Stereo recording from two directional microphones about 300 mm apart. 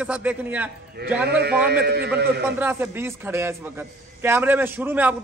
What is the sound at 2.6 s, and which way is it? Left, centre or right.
A man's voice, centre.